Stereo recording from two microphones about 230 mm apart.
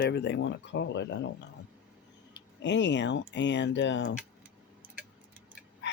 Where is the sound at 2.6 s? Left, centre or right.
Left.